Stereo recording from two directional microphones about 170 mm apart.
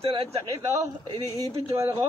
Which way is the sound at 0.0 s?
35° right (ahead or behind).